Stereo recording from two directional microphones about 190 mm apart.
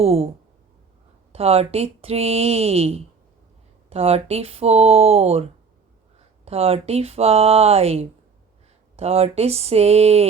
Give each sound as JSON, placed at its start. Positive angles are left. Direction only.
{"t": 0.0, "sound": "speech", "side_deg": -30}
{"t": 1.3, "sound": "speech", "side_deg": -30}